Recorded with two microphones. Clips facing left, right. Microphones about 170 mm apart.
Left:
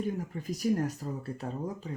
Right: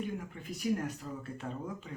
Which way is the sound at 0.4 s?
40° left (ahead or behind).